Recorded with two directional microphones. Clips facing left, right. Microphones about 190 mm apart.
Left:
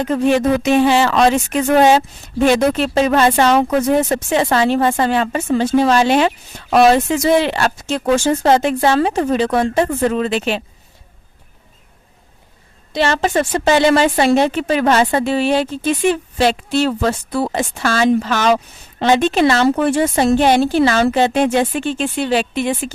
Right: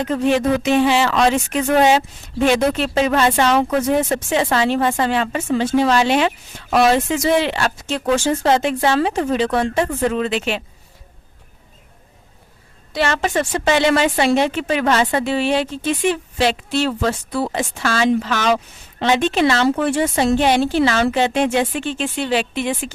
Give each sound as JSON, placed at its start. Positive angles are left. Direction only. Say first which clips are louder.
{"t": 0.1, "sound": "a woman's voice", "louder": "left 3 dB", "side_deg": 45}
{"t": 12.9, "sound": "a woman's voice", "louder": "left 3 dB", "side_deg": 30}